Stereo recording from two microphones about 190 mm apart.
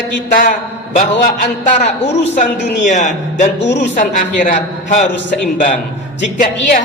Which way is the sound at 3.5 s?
65° left (ahead or behind).